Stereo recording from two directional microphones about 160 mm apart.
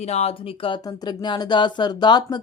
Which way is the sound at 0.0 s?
40° left (ahead or behind).